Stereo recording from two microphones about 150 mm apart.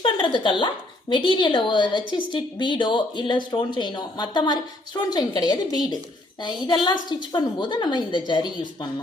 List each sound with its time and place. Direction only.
0.3 s a woman's voice: 35° left (ahead or behind)